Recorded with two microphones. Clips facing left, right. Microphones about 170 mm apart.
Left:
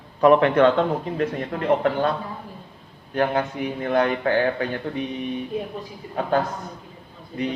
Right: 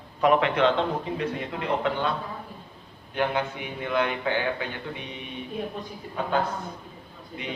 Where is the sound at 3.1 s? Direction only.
40° left (ahead or behind).